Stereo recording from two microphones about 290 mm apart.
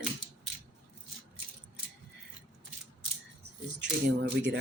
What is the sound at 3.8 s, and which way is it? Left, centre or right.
Speech, right.